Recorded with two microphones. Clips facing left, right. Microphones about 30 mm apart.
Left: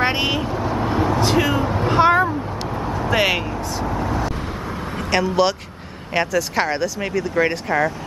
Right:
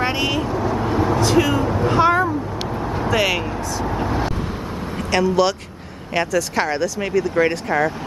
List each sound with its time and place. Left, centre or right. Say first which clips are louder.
0.0 s speech: left 1 dB; left
0.7 s vehicle: left 1 dB; centre
1.9 s a sound: left 1 dB; centre
3.8 s vehicle: right 1 dB; centre
4.9 s speech: right 1 dB; centre